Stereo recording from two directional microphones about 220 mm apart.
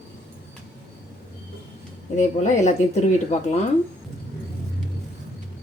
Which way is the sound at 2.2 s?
30° left (ahead or behind).